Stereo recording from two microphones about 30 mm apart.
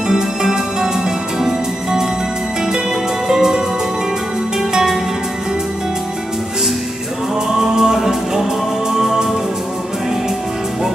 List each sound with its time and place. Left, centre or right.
0.1 s music: centre
3.3 s music: centre
7.5 s music: centre